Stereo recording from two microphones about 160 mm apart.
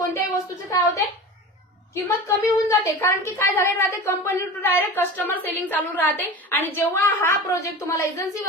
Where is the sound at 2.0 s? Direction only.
15° left (ahead or behind).